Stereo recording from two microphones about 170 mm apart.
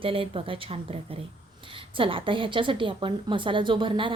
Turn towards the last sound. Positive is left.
turn(degrees=-30)  # may be behind; listen again after turning